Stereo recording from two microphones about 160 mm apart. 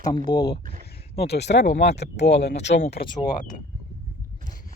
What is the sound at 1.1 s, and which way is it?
Speech, 90° left.